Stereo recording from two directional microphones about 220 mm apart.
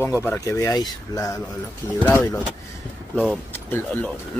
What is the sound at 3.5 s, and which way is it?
Speech, 10° left (ahead or behind).